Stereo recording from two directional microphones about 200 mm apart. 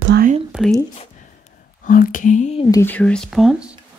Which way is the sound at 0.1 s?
45° right (ahead or behind).